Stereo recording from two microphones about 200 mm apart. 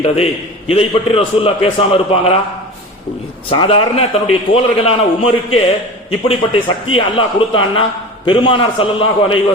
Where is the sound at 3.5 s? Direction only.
30° left (ahead or behind).